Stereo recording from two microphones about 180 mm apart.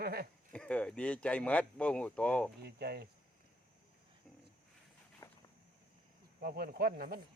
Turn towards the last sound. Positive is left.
turn(degrees=-60)  # may be behind; listen again after turning